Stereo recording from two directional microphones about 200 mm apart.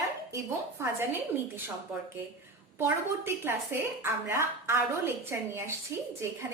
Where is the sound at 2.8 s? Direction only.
10° right (ahead or behind).